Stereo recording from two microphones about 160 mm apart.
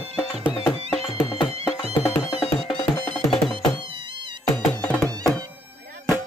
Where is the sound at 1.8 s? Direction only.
15° left (ahead or behind).